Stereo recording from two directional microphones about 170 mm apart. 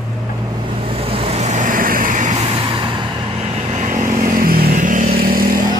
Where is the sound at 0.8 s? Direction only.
35° right (ahead or behind).